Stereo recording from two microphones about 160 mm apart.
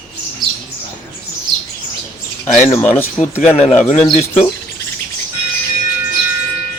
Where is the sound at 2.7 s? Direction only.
10° left (ahead or behind).